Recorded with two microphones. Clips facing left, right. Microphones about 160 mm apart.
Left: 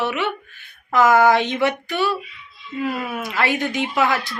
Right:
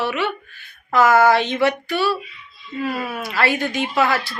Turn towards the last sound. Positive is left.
turn(degrees=20)  # may be behind; listen again after turning